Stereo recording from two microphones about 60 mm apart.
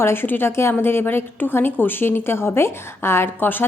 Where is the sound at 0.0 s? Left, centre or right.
Left.